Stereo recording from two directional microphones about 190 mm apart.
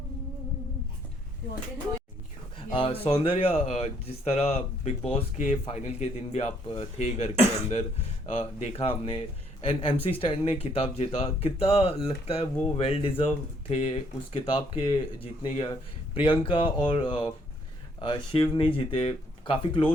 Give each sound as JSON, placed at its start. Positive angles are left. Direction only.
{"t": 2.6, "sound": "speech", "side_deg": 25}
{"t": 8.3, "sound": "speech", "side_deg": 35}